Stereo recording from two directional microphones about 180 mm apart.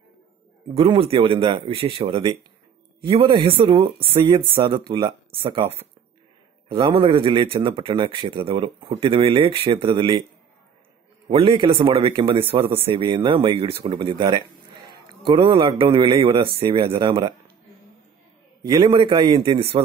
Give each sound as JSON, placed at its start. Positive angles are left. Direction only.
{"t": 0.7, "sound": "a man's voice", "side_deg": -30}
{"t": 6.7, "sound": "speech", "side_deg": -30}
{"t": 11.2, "sound": "speech", "side_deg": -30}
{"t": 18.7, "sound": "speech", "side_deg": -25}